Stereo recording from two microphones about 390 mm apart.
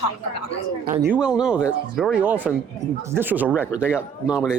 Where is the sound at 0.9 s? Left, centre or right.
Centre.